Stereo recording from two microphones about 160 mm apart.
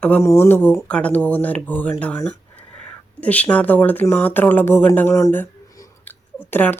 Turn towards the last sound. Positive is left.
turn(degrees=10)  # may be behind; listen again after turning